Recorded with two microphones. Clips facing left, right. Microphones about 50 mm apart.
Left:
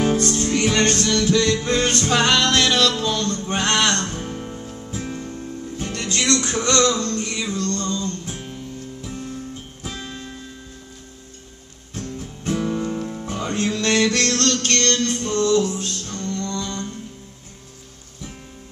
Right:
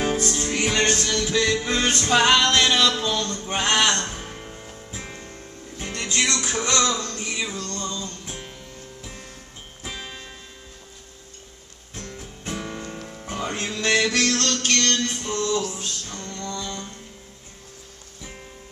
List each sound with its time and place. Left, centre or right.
0.0 s music: centre
9.8 s music: centre
12.5 s music: centre